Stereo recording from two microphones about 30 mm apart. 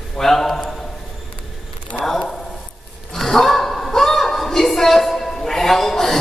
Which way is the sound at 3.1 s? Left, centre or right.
Centre.